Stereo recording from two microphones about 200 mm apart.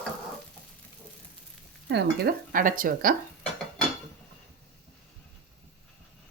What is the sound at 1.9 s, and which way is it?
Speech, 50° right (ahead or behind).